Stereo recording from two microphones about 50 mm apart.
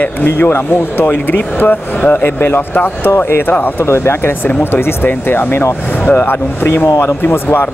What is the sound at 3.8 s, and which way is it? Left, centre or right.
Speech, left.